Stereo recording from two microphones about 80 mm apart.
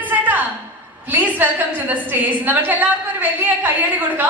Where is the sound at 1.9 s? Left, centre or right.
Right.